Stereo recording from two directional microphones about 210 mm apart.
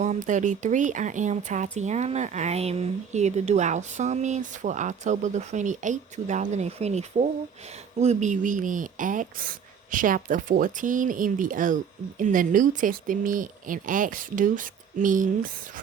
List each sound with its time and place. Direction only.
0.0 s speech: 35° right (ahead or behind)